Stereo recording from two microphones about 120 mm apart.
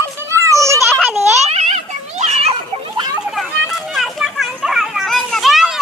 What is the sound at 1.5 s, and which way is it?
Children playing, 70° right (ahead or behind).